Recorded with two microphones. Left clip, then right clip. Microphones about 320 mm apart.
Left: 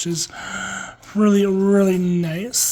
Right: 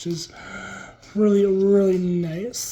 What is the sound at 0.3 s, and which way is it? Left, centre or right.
Speech, left.